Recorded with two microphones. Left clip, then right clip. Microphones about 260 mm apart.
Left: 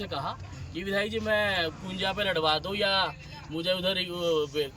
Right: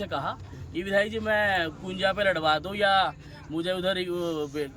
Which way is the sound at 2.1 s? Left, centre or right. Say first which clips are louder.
Even; centre.